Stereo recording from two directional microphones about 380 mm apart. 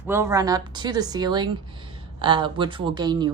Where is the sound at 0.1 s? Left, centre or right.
Centre.